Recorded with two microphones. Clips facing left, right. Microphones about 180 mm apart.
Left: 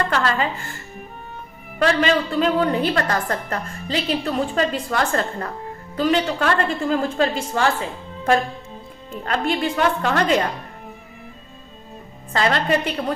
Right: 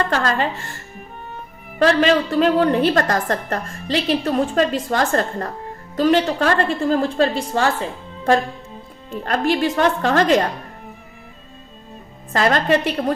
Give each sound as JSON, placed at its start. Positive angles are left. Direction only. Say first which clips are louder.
{"t": 0.1, "sound": "a woman's voice", "louder": "right 1 dB", "side_deg": -40}
{"t": 1.8, "sound": "a woman's voice", "louder": "right 3 dB", "side_deg": -40}
{"t": 12.3, "sound": "a woman's voice", "louder": "right 3 dB", "side_deg": -45}